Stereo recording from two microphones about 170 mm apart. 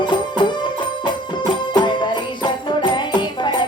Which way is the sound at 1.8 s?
25° left (ahead or behind).